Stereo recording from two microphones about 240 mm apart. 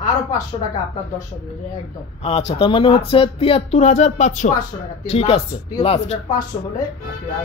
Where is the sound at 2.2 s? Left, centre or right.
Left.